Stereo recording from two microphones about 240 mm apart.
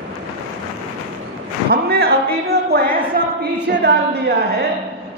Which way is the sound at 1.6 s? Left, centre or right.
Right.